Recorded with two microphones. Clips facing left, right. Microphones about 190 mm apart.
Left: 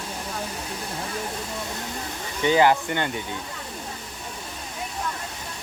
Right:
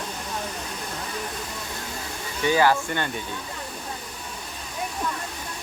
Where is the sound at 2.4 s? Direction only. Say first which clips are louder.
Left 2 dB; 20° left (ahead or behind).